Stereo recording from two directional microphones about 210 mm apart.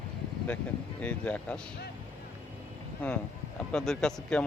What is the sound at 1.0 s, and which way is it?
Speech, 5° left (ahead or behind).